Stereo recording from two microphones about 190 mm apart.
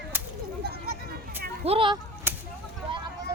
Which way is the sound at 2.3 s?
10° right (ahead or behind).